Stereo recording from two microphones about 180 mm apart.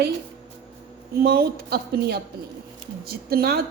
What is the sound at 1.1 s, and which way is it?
A woman's voice, 60° right (ahead or behind).